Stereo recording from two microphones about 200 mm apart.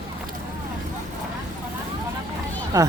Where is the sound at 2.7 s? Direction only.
15° right (ahead or behind).